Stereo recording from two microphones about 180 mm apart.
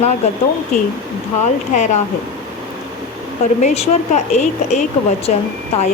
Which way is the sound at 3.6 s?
35° left (ahead or behind).